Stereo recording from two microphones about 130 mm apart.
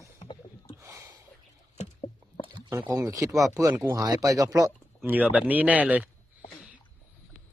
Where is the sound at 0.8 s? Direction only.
20° right (ahead or behind).